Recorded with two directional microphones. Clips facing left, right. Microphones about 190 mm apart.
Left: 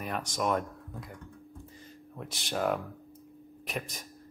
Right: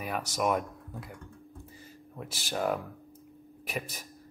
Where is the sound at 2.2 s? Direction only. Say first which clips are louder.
Even; 5° right (ahead or behind).